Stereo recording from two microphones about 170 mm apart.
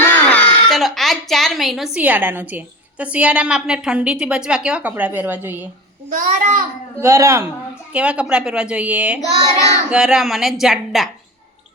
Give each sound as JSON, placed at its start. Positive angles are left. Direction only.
{"t": 0.0, "sound": "speech", "side_deg": 10}
{"t": 6.1, "sound": "a child's voice", "side_deg": -50}
{"t": 7.0, "sound": "a woman's voice", "side_deg": -15}